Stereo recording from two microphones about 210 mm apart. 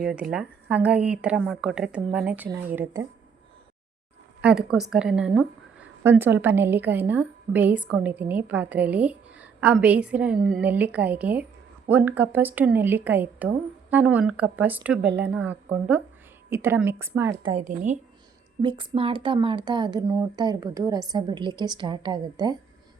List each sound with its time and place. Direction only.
0.0 s a woman's voice: 5° right (ahead or behind)
4.4 s a woman's voice: 5° right (ahead or behind)
15.0 s speech: 55° right (ahead or behind)
15.3 s a woman's voice: 5° right (ahead or behind)
17.4 s a woman's voice: 30° right (ahead or behind)
18.6 s a woman's voice: 25° right (ahead or behind)